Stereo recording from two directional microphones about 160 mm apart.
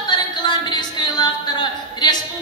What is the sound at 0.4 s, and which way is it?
Music, 30° left (ahead or behind).